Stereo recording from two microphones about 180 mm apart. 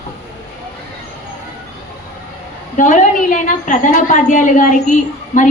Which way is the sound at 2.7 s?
45° left (ahead or behind).